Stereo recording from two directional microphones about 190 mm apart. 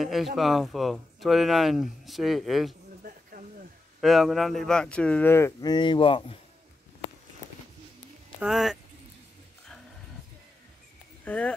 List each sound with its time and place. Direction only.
0.0 s speech: centre (ahead or behind)
3.0 s a sound: 45° right (ahead or behind)
4.0 s speech: centre (ahead or behind); by 6.3 s 25° left (ahead or behind)
8.4 s speech: centre (ahead or behind)
11.2 s speech: 5° left (ahead or behind)